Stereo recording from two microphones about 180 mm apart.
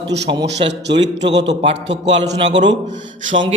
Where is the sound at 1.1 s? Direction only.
75° right (ahead or behind).